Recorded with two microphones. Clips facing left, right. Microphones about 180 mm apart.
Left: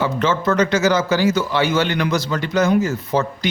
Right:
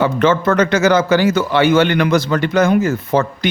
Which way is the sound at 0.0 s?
55° right (ahead or behind).